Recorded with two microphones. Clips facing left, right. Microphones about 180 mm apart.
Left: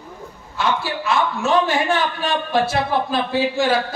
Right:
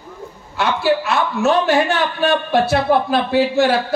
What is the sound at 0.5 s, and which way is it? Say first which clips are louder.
A man's voice: right 5 dB; 65° right (ahead or behind).